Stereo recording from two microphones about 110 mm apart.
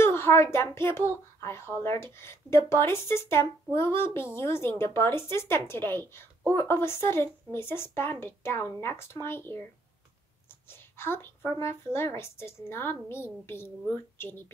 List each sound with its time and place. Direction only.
0.0 s speech: 20° left (ahead or behind)
10.7 s speech: 20° left (ahead or behind)